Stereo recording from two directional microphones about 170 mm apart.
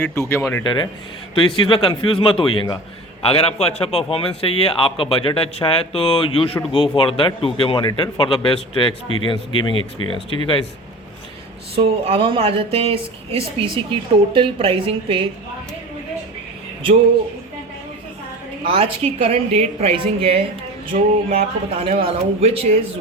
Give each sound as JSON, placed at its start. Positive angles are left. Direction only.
{"t": 0.0, "sound": "speech", "side_deg": 15}
{"t": 0.6, "sound": "speech", "side_deg": 25}
{"t": 11.7, "sound": "speech", "side_deg": -35}
{"t": 18.6, "sound": "speech", "side_deg": -35}
{"t": 20.9, "sound": "music", "side_deg": -50}
{"t": 21.2, "sound": "speech", "side_deg": -35}